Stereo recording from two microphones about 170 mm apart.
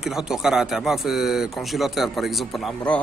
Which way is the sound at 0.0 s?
5° right (ahead or behind).